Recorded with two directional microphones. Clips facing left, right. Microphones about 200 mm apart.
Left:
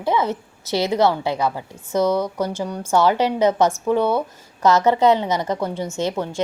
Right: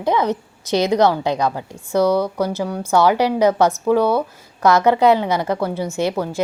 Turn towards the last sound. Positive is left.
turn(degrees=-10)  # may be behind; listen again after turning